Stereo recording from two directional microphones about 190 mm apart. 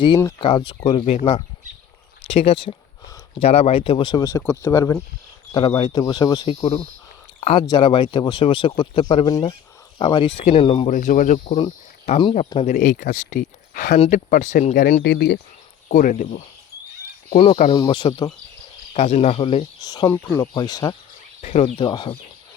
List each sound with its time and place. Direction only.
0.3 s speech: 25° left (ahead or behind)
6.5 s speech: 30° left (ahead or behind)
10.8 s speech: 45° left (ahead or behind)
11.5 s speech: 30° left (ahead or behind)
15.0 s speech: 60° left (ahead or behind)
15.9 s speech: 45° left (ahead or behind)
17.3 s speech: 30° left (ahead or behind)
18.9 s speech: 35° left (ahead or behind); by 20.9 s 20° left (ahead or behind)
21.4 s speech: 35° left (ahead or behind)